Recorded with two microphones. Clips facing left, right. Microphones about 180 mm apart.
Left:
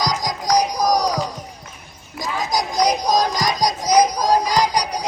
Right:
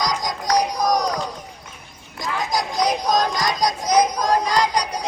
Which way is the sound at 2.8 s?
15° left (ahead or behind).